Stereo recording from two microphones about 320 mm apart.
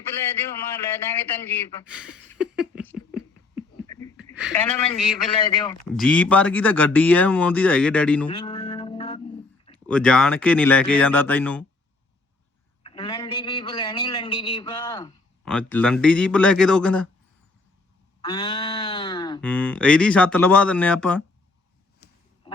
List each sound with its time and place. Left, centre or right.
0.9 s speech: centre
1.9 s speech: centre
4.2 s a woman's voice: centre
5.5 s speech: centre
5.9 s speech: centre
8.3 s mantra: centre
9.7 s speech: centre
12.8 s a man's voice: centre
18.2 s speech: centre
22.5 s a sound: centre